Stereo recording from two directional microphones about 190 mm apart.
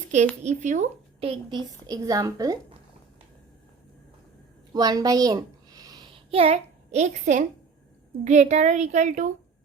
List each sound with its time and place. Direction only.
0.4 s a woman's voice: 40° right (ahead or behind); by 2.6 s 20° right (ahead or behind)
4.7 s a sound: 20° right (ahead or behind); by 7.4 s 40° right (ahead or behind)
8.2 s a woman's voice: 40° right (ahead or behind)